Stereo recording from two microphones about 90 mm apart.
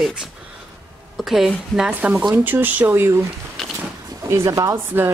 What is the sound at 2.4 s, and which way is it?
Speech, 20° right (ahead or behind).